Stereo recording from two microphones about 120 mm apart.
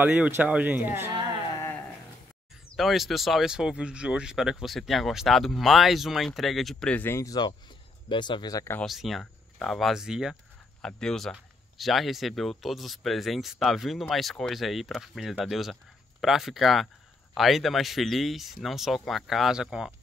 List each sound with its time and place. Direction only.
0.0 s speech: 15° right (ahead or behind)
1.6 s a sound: 15° left (ahead or behind)
2.7 s speech: centre (ahead or behind); by 7.3 s 20° left (ahead or behind)
8.1 s speech: 40° left (ahead or behind)
8.8 s speech: centre (ahead or behind)
10.8 s speech: 5° left (ahead or behind)